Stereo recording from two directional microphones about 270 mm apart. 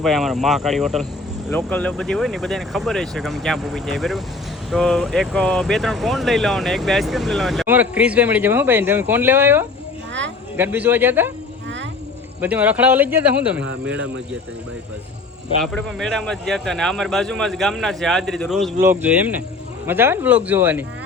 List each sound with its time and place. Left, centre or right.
0.0 s speech: centre
12.4 s speech: centre
13.6 s speech: right
15.6 s speech: centre